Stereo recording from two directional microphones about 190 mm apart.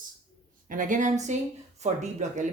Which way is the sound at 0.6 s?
45° right (ahead or behind).